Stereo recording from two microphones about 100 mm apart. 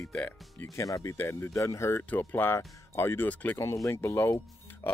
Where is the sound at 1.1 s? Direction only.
25° left (ahead or behind).